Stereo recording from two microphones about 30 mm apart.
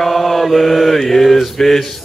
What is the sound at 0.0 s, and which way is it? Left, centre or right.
Mantra, centre.